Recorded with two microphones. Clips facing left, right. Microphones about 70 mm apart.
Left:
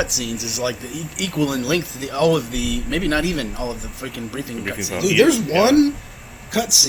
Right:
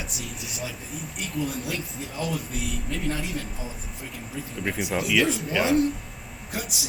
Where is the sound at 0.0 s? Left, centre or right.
Left.